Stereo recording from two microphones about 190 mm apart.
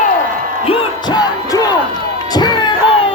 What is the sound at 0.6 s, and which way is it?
Music, 25° left (ahead or behind).